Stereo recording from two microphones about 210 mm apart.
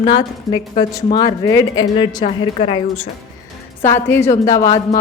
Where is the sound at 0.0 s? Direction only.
20° left (ahead or behind).